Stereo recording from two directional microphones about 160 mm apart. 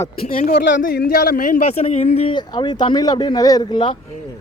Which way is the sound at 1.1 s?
70° left (ahead or behind).